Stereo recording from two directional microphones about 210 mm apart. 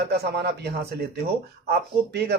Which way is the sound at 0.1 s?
50° right (ahead or behind).